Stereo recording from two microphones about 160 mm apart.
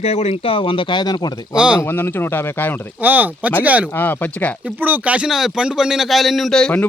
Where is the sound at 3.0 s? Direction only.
10° right (ahead or behind).